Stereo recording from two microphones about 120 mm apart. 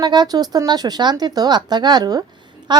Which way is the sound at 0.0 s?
35° right (ahead or behind).